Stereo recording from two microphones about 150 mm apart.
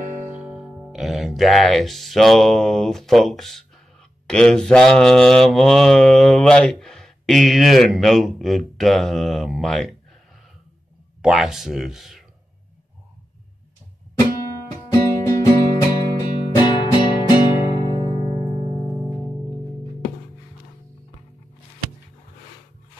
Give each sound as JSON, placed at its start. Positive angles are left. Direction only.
{"t": 0.4, "sound": "speech", "side_deg": -5}
{"t": 4.3, "sound": "mantra", "side_deg": 5}
{"t": 11.2, "sound": "mantra", "side_deg": 0}
{"t": 14.4, "sound": "music", "side_deg": 25}
{"t": 19.1, "sound": "music", "side_deg": 10}